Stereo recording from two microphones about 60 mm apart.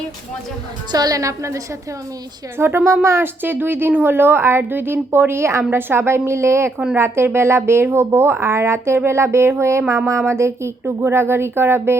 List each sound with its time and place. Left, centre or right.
0.9 s a woman's voice: right
2.6 s a woman's voice: right